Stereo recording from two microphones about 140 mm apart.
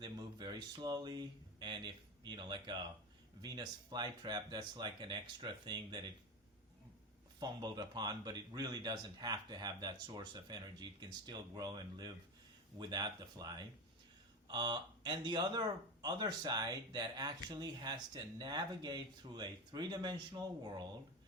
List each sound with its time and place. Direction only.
0.0 s speech: 30° right (ahead or behind)
7.3 s speech: 30° right (ahead or behind)